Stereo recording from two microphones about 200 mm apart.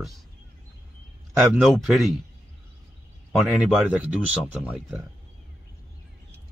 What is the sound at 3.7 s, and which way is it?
Speech, 5° right (ahead or behind).